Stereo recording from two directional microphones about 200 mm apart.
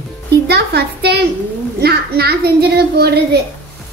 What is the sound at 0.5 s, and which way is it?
A child's voice, 55° right (ahead or behind).